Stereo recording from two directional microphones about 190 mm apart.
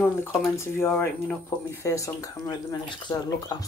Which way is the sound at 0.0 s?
10° left (ahead or behind).